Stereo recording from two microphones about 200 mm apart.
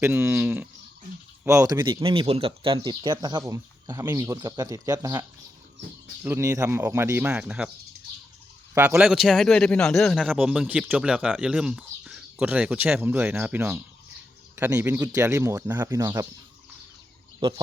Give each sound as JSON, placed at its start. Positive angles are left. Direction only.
{"t": 0.0, "sound": "speech", "side_deg": -10}
{"t": 6.2, "sound": "speech", "side_deg": -15}
{"t": 8.7, "sound": "a man's voice", "side_deg": -10}
{"t": 17.4, "sound": "speech", "side_deg": -25}